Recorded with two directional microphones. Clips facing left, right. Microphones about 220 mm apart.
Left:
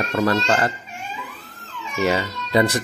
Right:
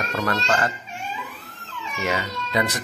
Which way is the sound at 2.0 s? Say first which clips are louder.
Left 5 dB; 35° left (ahead or behind).